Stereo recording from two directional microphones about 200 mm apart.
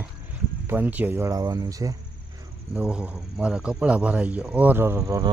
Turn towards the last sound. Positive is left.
turn(degrees=-15)  # may be behind; listen again after turning